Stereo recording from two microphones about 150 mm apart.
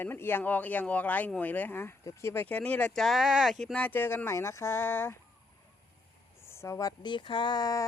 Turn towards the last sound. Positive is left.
turn(degrees=25)  # may be behind; listen again after turning